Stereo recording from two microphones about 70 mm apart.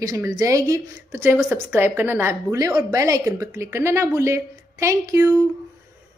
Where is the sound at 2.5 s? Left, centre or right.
Right.